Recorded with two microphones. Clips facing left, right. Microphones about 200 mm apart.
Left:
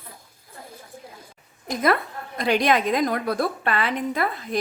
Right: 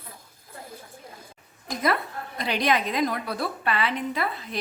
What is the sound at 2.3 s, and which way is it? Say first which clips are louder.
A woman's voice: left 4 dB; 50° left (ahead or behind).